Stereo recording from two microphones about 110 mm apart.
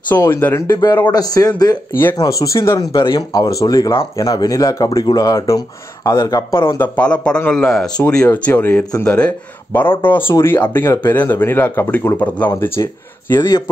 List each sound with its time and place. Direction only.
0.1 s speech: 20° left (ahead or behind)
0.7 s speech: 40° left (ahead or behind)
1.9 s speech: 20° left (ahead or behind)
2.9 s speech: 50° left (ahead or behind); by 6.4 s 35° left (ahead or behind)
6.6 s speech: 20° left (ahead or behind)
7.0 s speech: 10° left (ahead or behind)
13.4 s speech: 35° left (ahead or behind)